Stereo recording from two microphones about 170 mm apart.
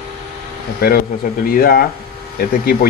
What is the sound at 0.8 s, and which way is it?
Speech, 65° left (ahead or behind).